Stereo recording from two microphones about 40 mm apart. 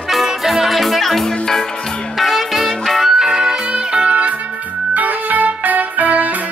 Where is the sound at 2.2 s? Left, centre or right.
Centre.